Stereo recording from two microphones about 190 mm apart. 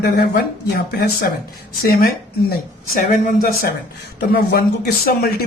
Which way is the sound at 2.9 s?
50° left (ahead or behind).